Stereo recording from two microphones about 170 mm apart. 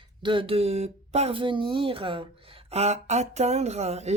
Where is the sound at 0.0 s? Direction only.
30° right (ahead or behind).